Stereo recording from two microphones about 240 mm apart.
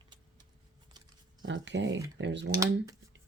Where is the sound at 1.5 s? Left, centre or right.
Right.